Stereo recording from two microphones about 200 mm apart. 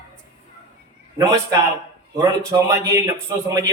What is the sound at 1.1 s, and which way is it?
A man's voice, 15° right (ahead or behind).